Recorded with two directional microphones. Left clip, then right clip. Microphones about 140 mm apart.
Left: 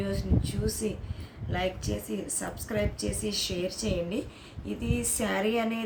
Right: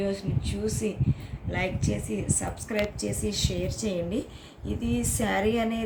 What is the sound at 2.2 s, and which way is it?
A woman's voice, 10° left (ahead or behind).